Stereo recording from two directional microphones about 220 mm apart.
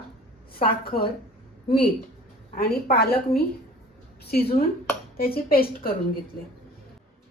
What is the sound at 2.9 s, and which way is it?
A woman's voice, 45° left (ahead or behind).